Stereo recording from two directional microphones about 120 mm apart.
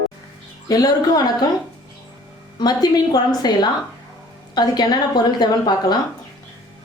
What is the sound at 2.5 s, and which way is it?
A woman's voice, 35° left (ahead or behind).